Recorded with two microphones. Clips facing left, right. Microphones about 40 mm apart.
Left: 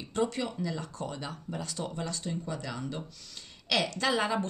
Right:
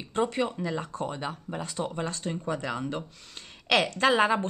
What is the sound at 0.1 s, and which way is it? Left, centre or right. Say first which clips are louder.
A woman's voice: right 4 dB; right.